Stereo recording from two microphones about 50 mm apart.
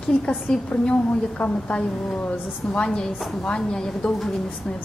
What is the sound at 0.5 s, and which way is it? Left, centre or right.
A woman's voice, centre.